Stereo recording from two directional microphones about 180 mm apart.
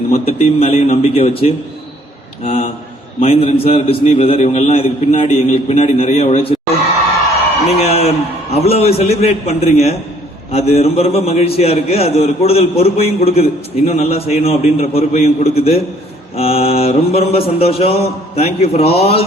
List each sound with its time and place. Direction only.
0.1 s a man's voice: 35° left (ahead or behind)
7.7 s a man's voice: 35° left (ahead or behind)